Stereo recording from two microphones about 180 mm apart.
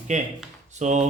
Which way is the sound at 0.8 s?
40° right (ahead or behind).